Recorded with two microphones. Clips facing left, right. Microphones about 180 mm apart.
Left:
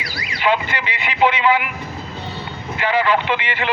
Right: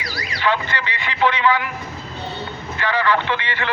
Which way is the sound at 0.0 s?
15° left (ahead or behind).